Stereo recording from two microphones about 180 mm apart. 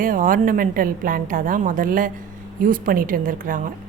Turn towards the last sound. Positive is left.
turn(degrees=-50)  # may be behind; listen again after turning